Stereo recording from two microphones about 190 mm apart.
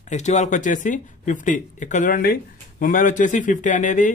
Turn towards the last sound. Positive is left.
turn(degrees=40)  # may be behind; listen again after turning